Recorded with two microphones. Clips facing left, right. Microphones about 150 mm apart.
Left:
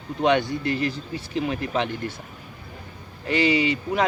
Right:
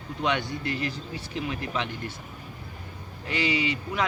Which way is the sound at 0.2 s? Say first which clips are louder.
Left 7 dB; 35° left (ahead or behind).